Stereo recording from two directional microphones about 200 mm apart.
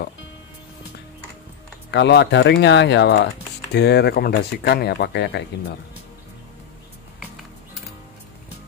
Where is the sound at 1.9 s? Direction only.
60° left (ahead or behind).